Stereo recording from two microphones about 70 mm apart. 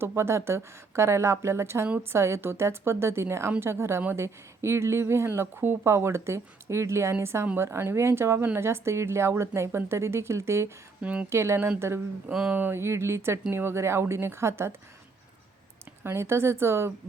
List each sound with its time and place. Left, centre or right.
0.0 s speech: right
11.0 s speech: centre
11.3 s speech: right
12.5 s a sound: right
12.8 s speech: right
16.0 s speech: right